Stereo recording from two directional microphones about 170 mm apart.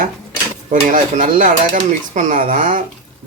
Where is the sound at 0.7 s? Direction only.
50° right (ahead or behind).